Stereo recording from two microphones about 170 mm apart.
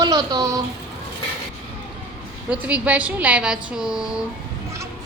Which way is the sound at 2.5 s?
10° right (ahead or behind).